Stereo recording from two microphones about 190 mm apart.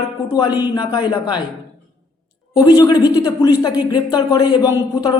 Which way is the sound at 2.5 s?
20° left (ahead or behind).